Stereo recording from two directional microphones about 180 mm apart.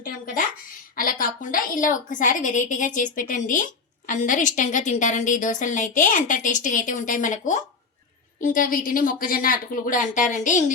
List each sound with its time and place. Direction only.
0.9 s a woman's voice: 50° left (ahead or behind)